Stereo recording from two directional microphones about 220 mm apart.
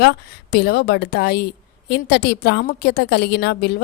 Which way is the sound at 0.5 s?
45° left (ahead or behind).